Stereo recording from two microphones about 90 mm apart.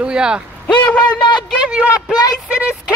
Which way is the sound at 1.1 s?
55° left (ahead or behind).